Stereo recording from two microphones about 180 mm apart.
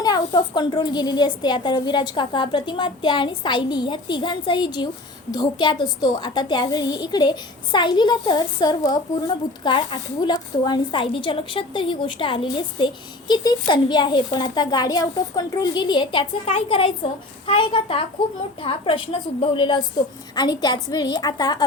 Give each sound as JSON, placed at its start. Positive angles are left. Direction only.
{"t": 0.0, "sound": "a woman's voice", "side_deg": 20}